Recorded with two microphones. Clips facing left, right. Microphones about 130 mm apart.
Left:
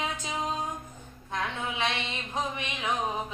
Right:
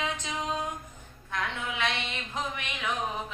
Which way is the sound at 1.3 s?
20° left (ahead or behind).